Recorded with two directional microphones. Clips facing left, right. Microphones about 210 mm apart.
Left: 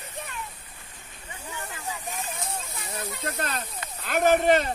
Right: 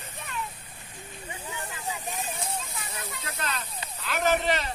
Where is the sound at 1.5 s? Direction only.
15° right (ahead or behind).